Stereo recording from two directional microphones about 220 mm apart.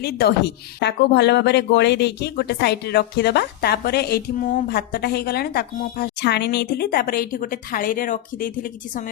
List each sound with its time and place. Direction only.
0.0 s a woman's voice: 45° left (ahead or behind)